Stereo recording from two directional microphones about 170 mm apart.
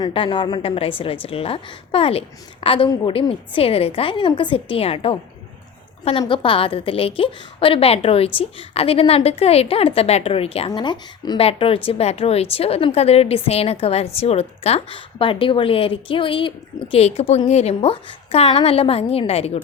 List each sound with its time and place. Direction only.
0.0 s a woman's voice: 30° left (ahead or behind)